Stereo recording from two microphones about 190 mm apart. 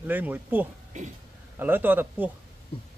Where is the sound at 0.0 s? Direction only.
10° right (ahead or behind).